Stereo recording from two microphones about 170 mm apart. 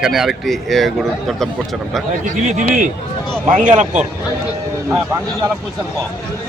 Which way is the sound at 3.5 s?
50° right (ahead or behind).